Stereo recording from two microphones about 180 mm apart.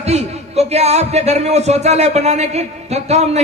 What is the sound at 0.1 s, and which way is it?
A man's voice, 35° right (ahead or behind).